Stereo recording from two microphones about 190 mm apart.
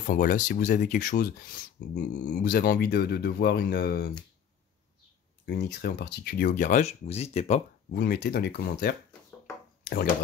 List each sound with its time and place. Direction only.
0.0 s speech: 45° left (ahead or behind)
5.4 s speech: 60° left (ahead or behind); by 7.6 s 35° left (ahead or behind)
7.9 s speech: 55° left (ahead or behind)